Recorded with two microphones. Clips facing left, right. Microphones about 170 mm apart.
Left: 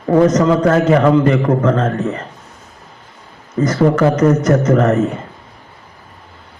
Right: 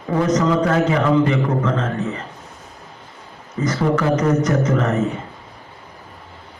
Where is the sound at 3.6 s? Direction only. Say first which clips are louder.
Left 5 dB; 45° left (ahead or behind).